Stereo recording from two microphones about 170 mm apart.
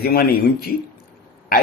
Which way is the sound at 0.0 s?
65° left (ahead or behind).